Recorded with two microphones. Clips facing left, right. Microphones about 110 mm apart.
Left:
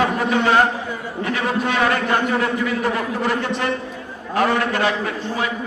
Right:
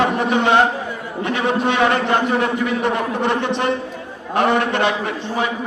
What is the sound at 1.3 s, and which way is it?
A man's voice, 25° right (ahead or behind).